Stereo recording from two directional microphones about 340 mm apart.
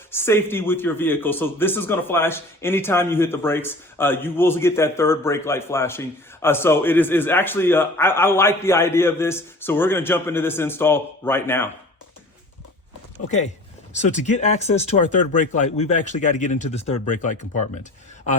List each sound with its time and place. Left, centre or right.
0.1 s a man's voice: centre
13.9 s speech: left